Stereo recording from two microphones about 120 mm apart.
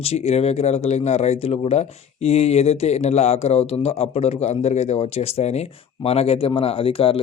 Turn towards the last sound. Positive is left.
turn(degrees=50)  # may be behind; listen again after turning